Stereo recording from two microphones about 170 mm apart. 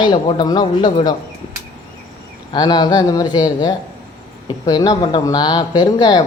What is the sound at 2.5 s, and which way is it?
Speech, 25° left (ahead or behind).